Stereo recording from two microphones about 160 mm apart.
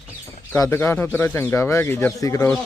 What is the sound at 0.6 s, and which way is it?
Speech, 15° left (ahead or behind).